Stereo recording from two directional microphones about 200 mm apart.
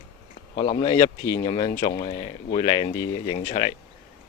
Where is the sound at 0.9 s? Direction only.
15° left (ahead or behind).